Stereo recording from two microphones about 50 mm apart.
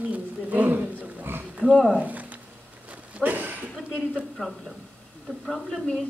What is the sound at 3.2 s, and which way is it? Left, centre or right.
Chuckle, right.